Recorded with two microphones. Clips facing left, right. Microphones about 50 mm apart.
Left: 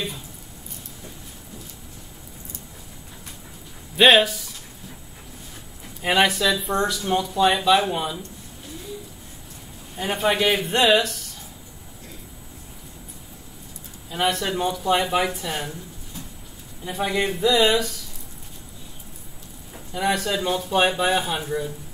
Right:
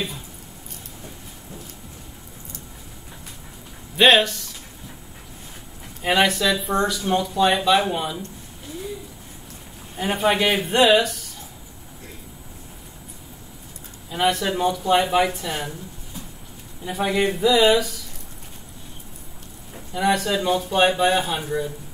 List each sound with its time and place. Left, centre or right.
3.9 s speech: centre
6.0 s speech: centre
9.9 s speech: centre
14.1 s speech: centre
16.8 s speech: centre
19.7 s speech: centre